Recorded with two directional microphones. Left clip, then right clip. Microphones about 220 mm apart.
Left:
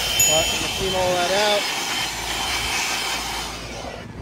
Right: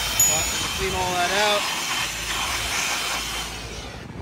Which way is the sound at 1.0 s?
5° right (ahead or behind).